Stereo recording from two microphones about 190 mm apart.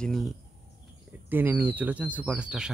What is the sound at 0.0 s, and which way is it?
Speech, centre (ahead or behind).